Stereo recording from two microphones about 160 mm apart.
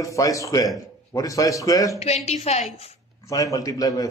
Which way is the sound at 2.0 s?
40° left (ahead or behind).